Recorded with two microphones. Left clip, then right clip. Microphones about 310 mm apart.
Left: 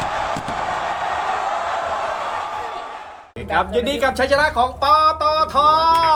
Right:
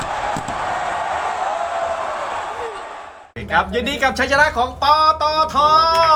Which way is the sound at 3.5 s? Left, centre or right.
Right.